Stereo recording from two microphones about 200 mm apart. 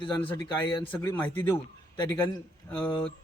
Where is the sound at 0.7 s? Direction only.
20° left (ahead or behind).